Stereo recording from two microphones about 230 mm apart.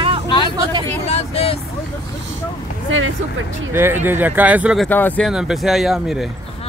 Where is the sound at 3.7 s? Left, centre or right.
Centre.